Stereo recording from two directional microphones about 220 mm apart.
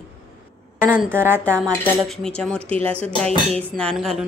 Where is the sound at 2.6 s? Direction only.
25° right (ahead or behind).